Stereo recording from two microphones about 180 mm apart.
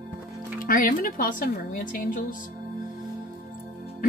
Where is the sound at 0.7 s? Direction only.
50° left (ahead or behind).